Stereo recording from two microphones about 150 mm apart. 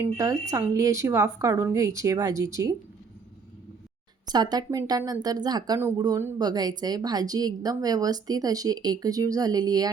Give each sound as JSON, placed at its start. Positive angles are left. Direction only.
{"t": 0.0, "sound": "a woman's voice", "side_deg": -20}
{"t": 4.3, "sound": "a woman's voice", "side_deg": -25}